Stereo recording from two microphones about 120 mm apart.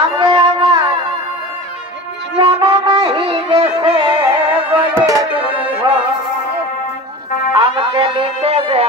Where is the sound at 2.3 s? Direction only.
45° right (ahead or behind).